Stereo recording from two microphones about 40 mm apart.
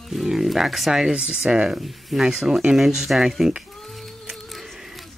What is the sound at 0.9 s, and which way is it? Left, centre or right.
Speech, centre.